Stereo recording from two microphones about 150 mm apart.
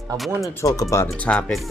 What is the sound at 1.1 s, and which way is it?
Speech, 5° left (ahead or behind).